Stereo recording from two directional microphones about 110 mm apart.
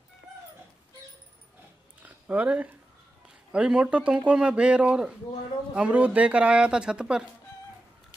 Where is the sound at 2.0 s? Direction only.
15° right (ahead or behind).